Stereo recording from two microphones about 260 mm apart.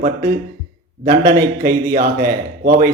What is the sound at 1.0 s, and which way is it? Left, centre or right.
Speech, right.